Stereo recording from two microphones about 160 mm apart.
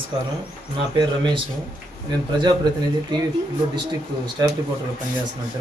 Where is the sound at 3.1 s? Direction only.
25° right (ahead or behind).